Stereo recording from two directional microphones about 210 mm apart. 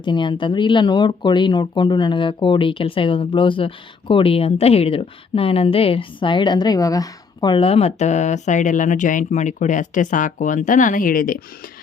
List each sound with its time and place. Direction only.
0.0 s a woman's voice: 20° left (ahead or behind); by 11.4 s 40° left (ahead or behind)